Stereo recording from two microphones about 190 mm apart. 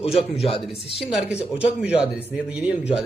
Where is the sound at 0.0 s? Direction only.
30° left (ahead or behind).